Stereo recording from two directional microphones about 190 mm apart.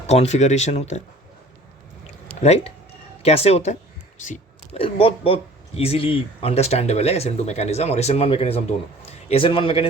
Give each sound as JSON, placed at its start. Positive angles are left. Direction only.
{"t": 0.1, "sound": "speech", "side_deg": 35}
{"t": 2.4, "sound": "speech", "side_deg": 35}